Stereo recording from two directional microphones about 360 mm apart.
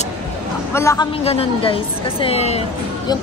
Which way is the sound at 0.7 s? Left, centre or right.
Centre.